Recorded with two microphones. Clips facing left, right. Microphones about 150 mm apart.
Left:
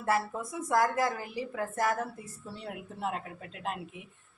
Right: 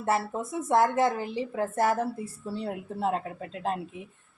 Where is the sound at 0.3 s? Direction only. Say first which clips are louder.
Right 4 dB; 25° right (ahead or behind).